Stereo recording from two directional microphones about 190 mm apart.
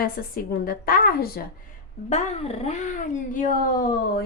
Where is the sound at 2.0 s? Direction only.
35° left (ahead or behind).